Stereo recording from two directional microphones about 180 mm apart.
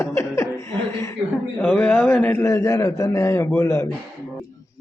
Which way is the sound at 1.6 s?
10° left (ahead or behind).